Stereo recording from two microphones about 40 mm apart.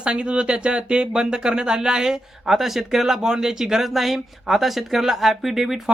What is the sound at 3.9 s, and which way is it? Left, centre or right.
Speech, centre.